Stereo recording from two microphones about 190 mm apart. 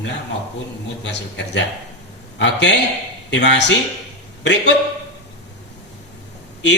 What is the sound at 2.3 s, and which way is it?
Speech, 65° left (ahead or behind).